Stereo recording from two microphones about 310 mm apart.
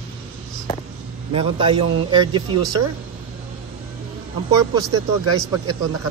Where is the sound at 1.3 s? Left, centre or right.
Centre.